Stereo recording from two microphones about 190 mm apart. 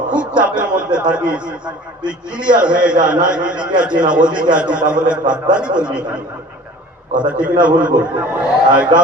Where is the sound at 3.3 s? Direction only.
5° right (ahead or behind).